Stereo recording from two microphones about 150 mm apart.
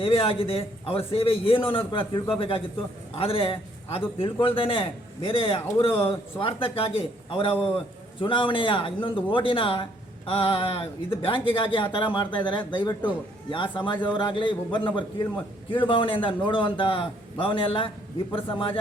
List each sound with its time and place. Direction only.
0.0 s a man's voice: 40° left (ahead or behind)